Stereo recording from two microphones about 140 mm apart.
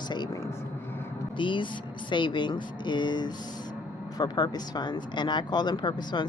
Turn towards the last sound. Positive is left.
turn(degrees=35)  # may be behind; listen again after turning